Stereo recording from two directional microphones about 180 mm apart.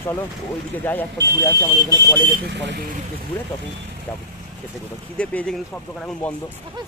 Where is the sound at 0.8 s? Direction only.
10° left (ahead or behind).